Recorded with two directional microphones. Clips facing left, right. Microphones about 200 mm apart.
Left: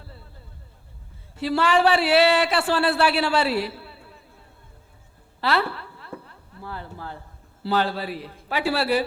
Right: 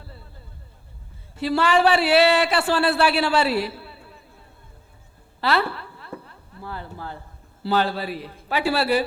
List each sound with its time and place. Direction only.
1.4 s a man's voice: 10° right (ahead or behind)
5.4 s a sound: 10° right (ahead or behind)
7.7 s a man's voice: 10° right (ahead or behind)